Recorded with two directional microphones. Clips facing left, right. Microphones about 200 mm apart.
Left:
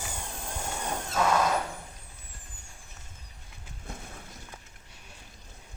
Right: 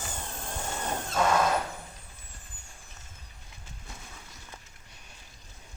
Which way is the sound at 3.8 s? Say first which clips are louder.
Left 6 dB; 55° left (ahead or behind).